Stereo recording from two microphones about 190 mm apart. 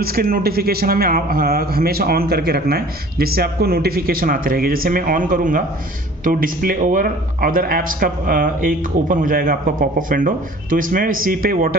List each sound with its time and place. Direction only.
0.0 s speech: 50° right (ahead or behind)